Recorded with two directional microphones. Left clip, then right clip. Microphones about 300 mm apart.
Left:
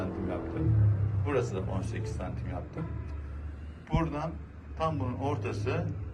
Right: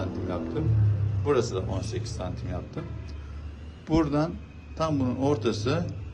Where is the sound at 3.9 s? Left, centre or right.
Centre.